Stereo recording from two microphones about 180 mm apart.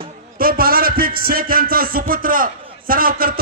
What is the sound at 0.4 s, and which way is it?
Music, 55° right (ahead or behind).